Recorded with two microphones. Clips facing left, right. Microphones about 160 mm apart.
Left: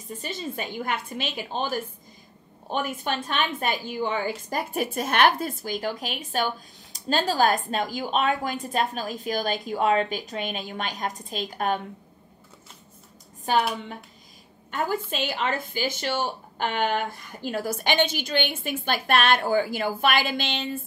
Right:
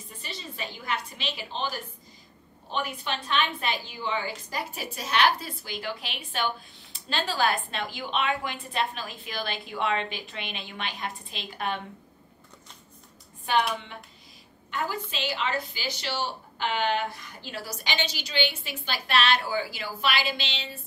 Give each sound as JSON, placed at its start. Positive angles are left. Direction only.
{"t": 0.1, "sound": "a woman's voice", "side_deg": 45}
{"t": 13.5, "sound": "a woman's voice", "side_deg": 40}
{"t": 14.7, "sound": "a woman's voice", "side_deg": 50}